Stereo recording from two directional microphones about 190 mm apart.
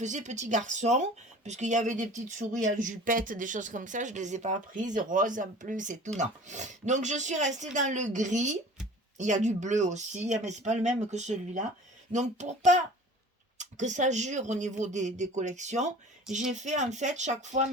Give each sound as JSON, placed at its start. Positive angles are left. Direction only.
{"t": 0.0, "sound": "speech", "side_deg": -40}